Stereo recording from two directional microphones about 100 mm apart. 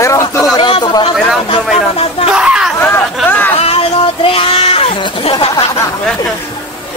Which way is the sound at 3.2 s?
20° left (ahead or behind).